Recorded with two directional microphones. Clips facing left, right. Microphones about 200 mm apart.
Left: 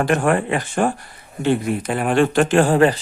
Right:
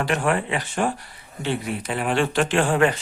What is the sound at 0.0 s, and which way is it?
Speech, 50° left (ahead or behind).